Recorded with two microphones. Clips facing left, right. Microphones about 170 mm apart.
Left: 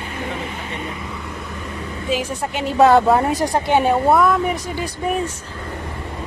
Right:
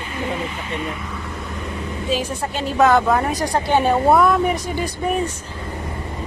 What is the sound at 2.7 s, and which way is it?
A woman's voice, 30° left (ahead or behind).